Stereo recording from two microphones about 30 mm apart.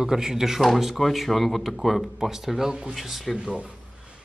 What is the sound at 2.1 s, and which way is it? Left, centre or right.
Speech, centre.